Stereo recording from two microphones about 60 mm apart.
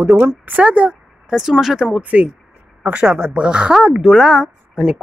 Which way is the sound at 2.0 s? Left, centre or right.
Right.